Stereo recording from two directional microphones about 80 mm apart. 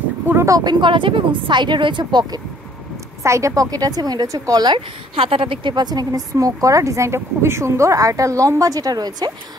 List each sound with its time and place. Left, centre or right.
0.5 s a woman's voice: right
3.3 s speech: right
5.4 s speech: right